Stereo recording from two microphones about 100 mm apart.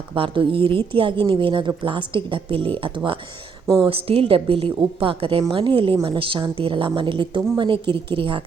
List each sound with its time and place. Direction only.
0.1 s a woman's voice: 60° right (ahead or behind)
3.8 s a woman's voice: 70° right (ahead or behind)